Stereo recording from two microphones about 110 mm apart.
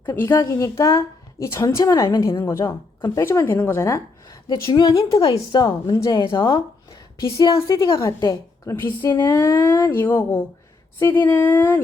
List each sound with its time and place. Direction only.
0.2 s a woman's voice: 20° left (ahead or behind)
2.6 s speech: 40° left (ahead or behind)
3.2 s a woman's voice: 20° left (ahead or behind)
4.4 s a woman's voice: 40° left (ahead or behind)
4.9 s a woman's voice: 55° left (ahead or behind)
5.6 s a woman's voice: 30° left (ahead or behind); by 6.6 s 45° left (ahead or behind)
7.2 s a woman's voice: 30° left (ahead or behind)
8.6 s a woman's voice: 20° left (ahead or behind)